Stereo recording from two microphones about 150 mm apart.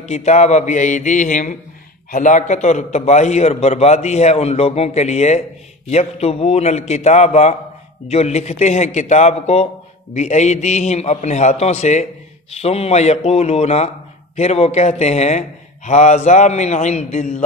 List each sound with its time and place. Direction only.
0.0 s a man's voice: 50° left (ahead or behind)